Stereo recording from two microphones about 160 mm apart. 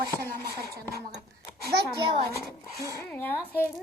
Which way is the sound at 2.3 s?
20° left (ahead or behind).